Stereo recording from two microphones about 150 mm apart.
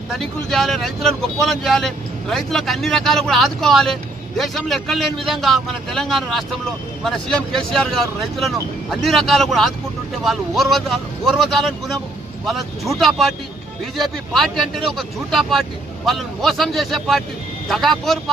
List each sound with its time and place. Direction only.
0.1 s speech: centre (ahead or behind)